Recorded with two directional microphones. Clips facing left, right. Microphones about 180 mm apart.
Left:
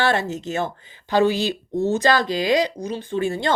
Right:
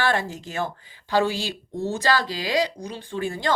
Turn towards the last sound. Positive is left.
turn(degrees=25)  # may be behind; listen again after turning